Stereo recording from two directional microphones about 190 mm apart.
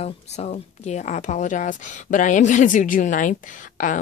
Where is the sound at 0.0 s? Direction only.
35° left (ahead or behind).